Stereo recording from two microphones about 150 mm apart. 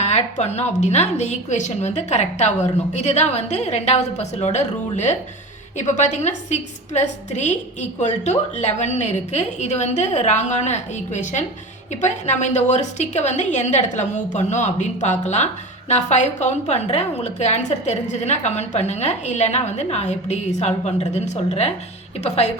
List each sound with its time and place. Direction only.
0.0 s a woman's voice: 45° left (ahead or behind)